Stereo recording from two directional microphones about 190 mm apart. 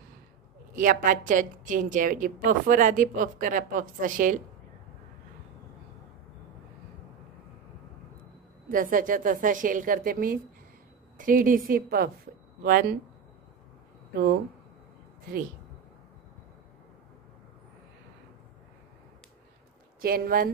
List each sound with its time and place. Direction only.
0.7 s a woman's voice: 45° right (ahead or behind)
8.6 s a woman's voice: 45° right (ahead or behind)
20.0 s a woman's voice: 50° right (ahead or behind)